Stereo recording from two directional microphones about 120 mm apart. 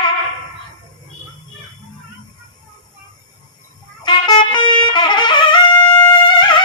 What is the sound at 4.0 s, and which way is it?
Music, 35° left (ahead or behind).